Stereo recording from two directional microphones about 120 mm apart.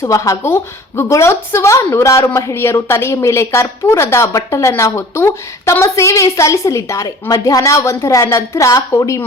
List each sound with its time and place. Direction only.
0.0 s a woman's voice: 25° left (ahead or behind)